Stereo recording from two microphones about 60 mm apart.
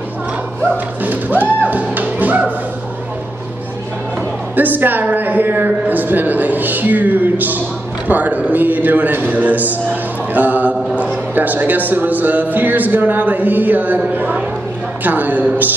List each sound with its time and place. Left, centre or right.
1.0 s music: right
4.6 s a man's voice: right